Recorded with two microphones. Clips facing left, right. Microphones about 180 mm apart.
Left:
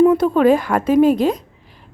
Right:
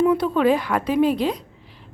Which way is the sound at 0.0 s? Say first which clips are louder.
Left 5 dB; 45° left (ahead or behind).